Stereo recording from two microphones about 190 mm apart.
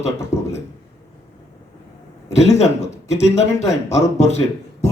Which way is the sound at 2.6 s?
35° left (ahead or behind).